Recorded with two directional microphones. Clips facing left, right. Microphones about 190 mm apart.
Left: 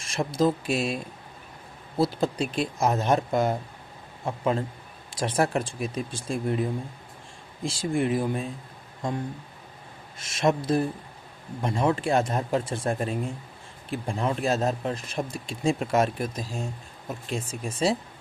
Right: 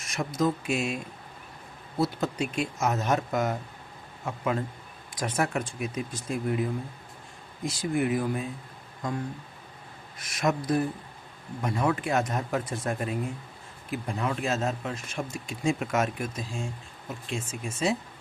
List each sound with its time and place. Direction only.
0.0 s speech: 30° left (ahead or behind)
2.0 s speech: 30° left (ahead or behind)
10.2 s speech: 25° left (ahead or behind)